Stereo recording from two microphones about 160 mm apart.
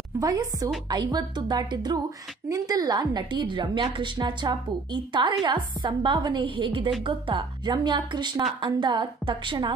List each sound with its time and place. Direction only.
0.2 s a woman's voice: 20° right (ahead or behind)